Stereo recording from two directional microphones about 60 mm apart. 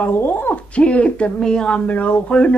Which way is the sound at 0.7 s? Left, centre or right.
Centre.